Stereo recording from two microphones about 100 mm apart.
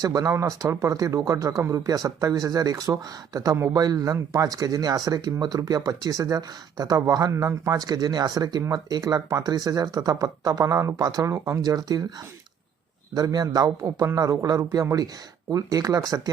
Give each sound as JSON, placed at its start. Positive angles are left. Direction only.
{"t": 0.0, "sound": "speech", "side_deg": -35}
{"t": 13.1, "sound": "speech", "side_deg": -40}